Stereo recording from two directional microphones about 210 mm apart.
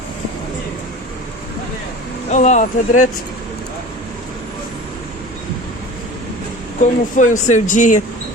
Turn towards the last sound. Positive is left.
turn(degrees=35)  # may be behind; listen again after turning